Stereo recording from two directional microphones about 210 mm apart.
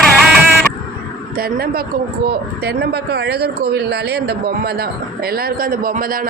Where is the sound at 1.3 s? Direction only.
45° right (ahead or behind).